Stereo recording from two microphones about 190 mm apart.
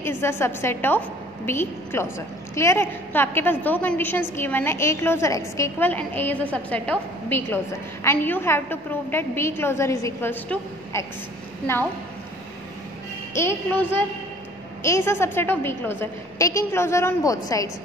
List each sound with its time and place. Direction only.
0.2 s a woman's voice: 10° left (ahead or behind)
13.3 s a woman's voice: 15° left (ahead or behind)